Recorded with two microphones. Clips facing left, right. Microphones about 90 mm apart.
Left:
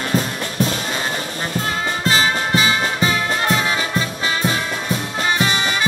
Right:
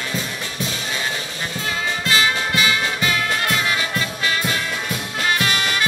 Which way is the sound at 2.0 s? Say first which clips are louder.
Left 2 dB; 35° left (ahead or behind).